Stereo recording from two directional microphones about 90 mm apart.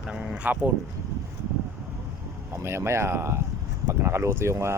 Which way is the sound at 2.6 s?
30° right (ahead or behind).